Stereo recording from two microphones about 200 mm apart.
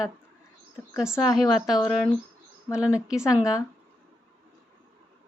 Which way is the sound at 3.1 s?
5° right (ahead or behind).